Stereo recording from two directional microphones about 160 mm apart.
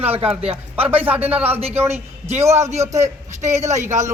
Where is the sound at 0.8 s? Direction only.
35° right (ahead or behind).